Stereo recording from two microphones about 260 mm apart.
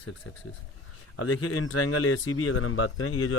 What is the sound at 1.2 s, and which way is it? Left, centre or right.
Speech, left.